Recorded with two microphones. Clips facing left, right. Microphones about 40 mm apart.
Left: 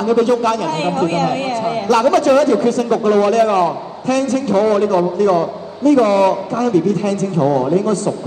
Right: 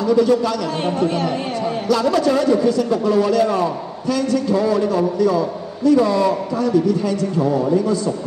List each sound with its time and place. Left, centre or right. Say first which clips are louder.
0.1 s a man's voice: left 2 dB; left